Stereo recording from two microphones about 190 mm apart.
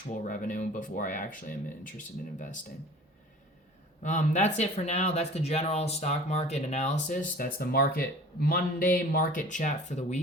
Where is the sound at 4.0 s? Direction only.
40° left (ahead or behind).